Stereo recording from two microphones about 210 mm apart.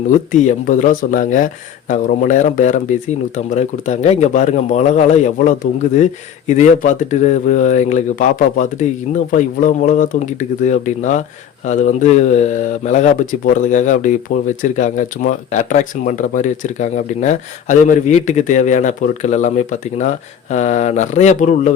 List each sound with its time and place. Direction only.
0.3 s speech: 35° left (ahead or behind)